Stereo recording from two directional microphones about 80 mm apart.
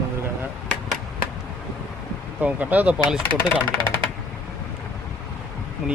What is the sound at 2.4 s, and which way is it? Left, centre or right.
Speech, centre.